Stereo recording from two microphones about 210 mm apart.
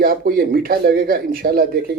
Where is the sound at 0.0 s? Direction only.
45° right (ahead or behind).